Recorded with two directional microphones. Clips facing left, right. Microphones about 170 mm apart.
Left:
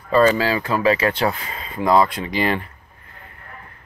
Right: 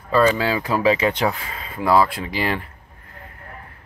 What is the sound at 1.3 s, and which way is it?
Speech, 5° right (ahead or behind).